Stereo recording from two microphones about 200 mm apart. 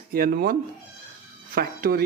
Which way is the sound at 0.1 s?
50° right (ahead or behind).